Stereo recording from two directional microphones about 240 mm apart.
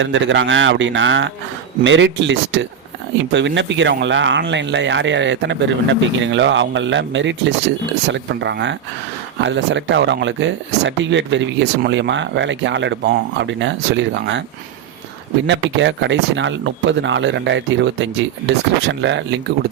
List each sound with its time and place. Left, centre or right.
0.0 s speech: right
15.4 s speech: right